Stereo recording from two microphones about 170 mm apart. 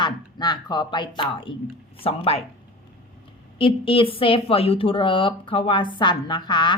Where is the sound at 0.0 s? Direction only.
25° left (ahead or behind).